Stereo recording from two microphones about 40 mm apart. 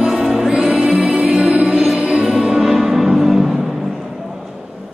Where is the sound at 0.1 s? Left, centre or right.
Centre.